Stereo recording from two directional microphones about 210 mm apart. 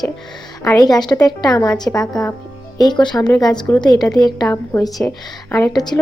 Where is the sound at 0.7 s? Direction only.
15° left (ahead or behind).